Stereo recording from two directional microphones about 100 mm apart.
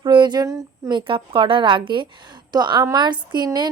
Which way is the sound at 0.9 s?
55° right (ahead or behind).